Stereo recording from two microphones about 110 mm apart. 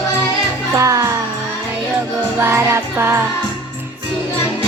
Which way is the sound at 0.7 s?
30° right (ahead or behind).